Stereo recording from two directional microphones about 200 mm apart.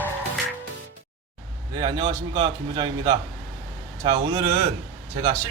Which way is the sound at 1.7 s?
25° right (ahead or behind).